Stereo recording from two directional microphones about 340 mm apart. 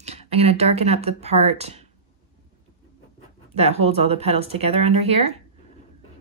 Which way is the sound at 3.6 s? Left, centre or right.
Centre.